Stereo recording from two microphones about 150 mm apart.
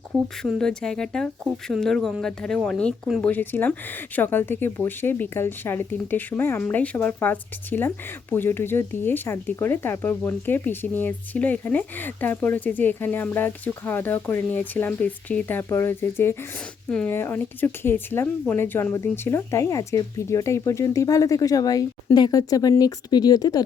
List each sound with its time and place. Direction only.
0.1 s speech: centre (ahead or behind); by 23.6 s 25° left (ahead or behind)